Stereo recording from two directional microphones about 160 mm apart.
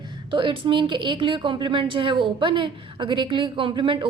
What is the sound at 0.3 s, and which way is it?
A woman's voice, 30° right (ahead or behind).